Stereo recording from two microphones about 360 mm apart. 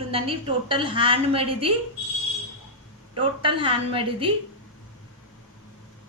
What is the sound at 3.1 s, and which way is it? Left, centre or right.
A woman's voice, centre.